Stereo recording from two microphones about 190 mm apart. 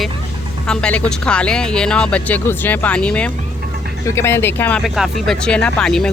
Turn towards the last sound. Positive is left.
turn(degrees=5)  # may be behind; listen again after turning